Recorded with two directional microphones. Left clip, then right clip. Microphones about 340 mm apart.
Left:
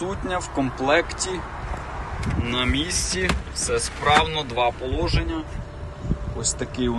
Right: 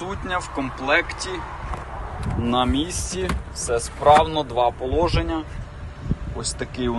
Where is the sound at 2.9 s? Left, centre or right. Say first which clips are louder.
Left 5 dB; right.